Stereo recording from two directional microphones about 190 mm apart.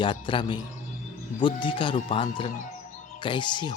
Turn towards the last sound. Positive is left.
turn(degrees=25)  # may be behind; listen again after turning